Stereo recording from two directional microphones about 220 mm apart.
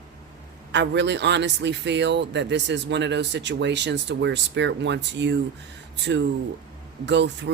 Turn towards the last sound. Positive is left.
turn(degrees=-50)  # may be behind; listen again after turning